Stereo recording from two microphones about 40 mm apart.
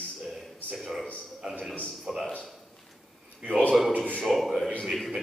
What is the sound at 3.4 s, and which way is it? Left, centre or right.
Speech, right.